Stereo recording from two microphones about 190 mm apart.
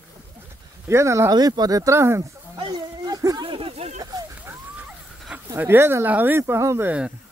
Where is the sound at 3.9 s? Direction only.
20° right (ahead or behind).